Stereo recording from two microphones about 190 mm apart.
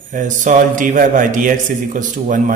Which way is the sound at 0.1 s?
40° right (ahead or behind).